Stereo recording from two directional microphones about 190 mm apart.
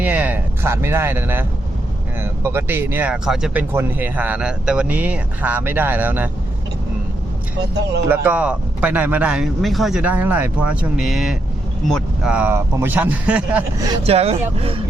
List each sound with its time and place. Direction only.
0.0 s a sound: 10° right (ahead or behind)
2.2 s speech: 15° right (ahead or behind)
8.1 s speech: 5° right (ahead or behind)
14.0 s speech: 30° right (ahead or behind)